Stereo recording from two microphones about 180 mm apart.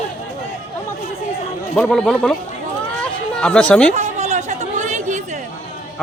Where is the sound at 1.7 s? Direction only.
5° left (ahead or behind).